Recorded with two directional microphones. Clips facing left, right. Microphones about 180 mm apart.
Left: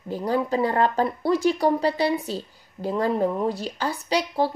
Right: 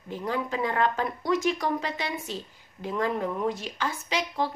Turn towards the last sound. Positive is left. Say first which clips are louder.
# left 6 dB
turn(degrees=35)  # may be behind; listen again after turning